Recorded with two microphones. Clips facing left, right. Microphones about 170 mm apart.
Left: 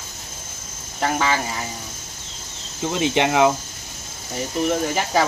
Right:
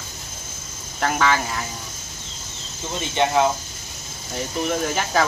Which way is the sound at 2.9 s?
90° left.